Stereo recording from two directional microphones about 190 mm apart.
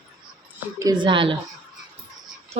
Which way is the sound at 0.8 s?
20° right (ahead or behind).